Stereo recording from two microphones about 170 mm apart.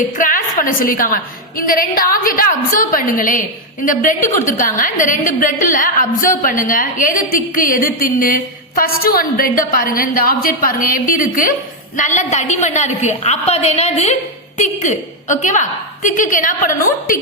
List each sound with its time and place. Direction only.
0.2 s a woman's voice: 55° left (ahead or behind)